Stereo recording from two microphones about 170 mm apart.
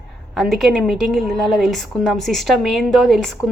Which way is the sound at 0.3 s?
Centre (ahead or behind).